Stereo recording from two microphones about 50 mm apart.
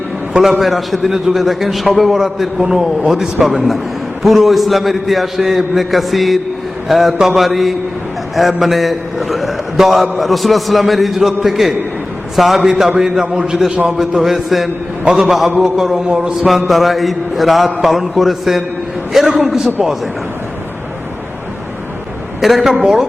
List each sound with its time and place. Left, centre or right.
0.3 s a man's voice: centre
13.7 s a man's voice: right
14.2 s a man's voice: centre
16.5 s a man's voice: centre
22.4 s a man's voice: centre